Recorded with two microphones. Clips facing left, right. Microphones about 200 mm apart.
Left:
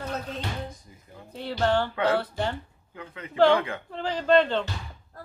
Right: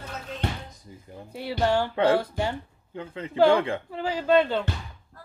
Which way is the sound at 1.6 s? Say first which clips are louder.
Right 1 dB; 10° right (ahead or behind).